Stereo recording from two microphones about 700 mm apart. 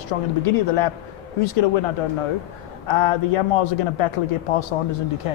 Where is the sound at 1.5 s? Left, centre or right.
Left.